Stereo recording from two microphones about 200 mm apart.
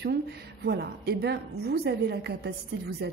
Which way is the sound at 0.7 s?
55° right (ahead or behind).